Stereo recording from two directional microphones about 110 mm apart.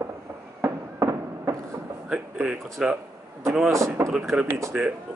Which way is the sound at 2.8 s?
5° right (ahead or behind).